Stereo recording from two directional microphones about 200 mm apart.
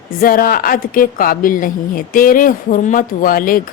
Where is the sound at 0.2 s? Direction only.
45° left (ahead or behind).